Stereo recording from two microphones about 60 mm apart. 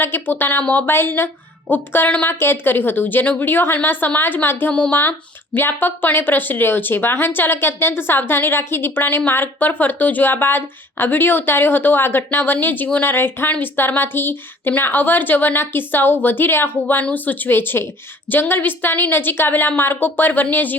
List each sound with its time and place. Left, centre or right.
0.0 s a woman's voice: left
4.7 s speech: left
5.5 s a woman's voice: left